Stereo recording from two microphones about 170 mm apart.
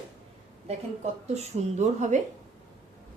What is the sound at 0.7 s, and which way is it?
A woman's voice, 40° right (ahead or behind).